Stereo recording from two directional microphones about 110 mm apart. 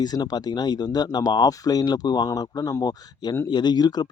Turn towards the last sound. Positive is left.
turn(degrees=40)  # may be behind; listen again after turning